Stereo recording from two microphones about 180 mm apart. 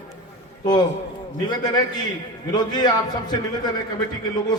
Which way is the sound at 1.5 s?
20° left (ahead or behind).